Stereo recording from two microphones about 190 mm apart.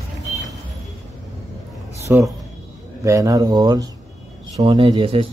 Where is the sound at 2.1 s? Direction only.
10° right (ahead or behind).